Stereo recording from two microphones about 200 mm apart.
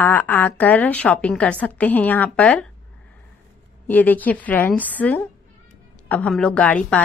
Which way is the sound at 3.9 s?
10° left (ahead or behind).